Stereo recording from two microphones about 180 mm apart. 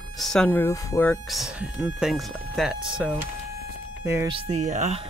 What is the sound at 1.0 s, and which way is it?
Speech, centre (ahead or behind).